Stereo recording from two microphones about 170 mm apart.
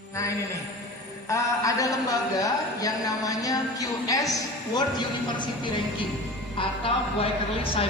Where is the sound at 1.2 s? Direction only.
20° left (ahead or behind).